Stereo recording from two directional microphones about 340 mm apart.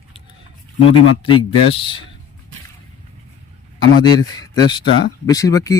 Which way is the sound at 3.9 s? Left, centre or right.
Centre.